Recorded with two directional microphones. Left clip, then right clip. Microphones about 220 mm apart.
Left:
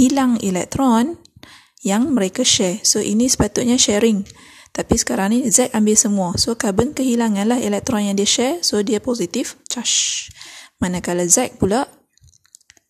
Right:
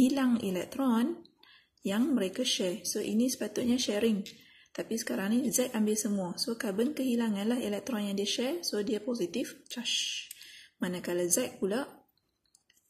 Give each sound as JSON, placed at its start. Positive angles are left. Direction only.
{"t": 0.0, "sound": "speech", "side_deg": 45}